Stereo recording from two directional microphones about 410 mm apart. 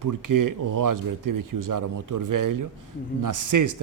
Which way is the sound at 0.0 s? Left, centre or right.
Right.